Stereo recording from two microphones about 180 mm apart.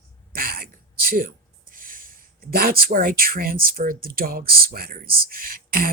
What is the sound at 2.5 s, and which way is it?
Speech, 55° right (ahead or behind).